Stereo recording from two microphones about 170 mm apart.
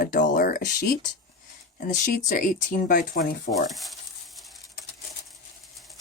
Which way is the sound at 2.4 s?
55° left (ahead or behind).